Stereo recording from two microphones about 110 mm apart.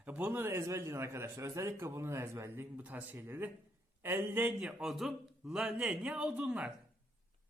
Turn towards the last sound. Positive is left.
turn(degrees=-10)  # may be behind; listen again after turning